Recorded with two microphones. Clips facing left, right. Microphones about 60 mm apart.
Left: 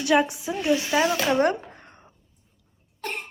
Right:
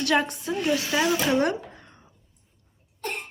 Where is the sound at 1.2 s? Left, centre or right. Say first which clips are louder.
Left 2 dB; left.